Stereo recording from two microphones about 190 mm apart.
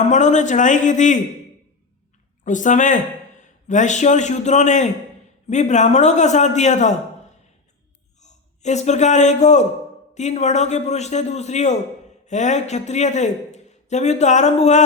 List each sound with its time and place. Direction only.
0.1 s a man's voice: 40° left (ahead or behind)
2.4 s a man's voice: 40° left (ahead or behind)
8.2 s a man's voice: 40° left (ahead or behind)